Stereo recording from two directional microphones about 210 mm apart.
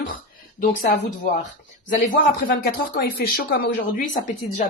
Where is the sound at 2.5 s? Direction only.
45° left (ahead or behind).